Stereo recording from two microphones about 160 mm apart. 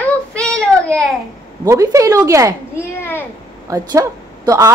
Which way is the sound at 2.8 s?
15° left (ahead or behind).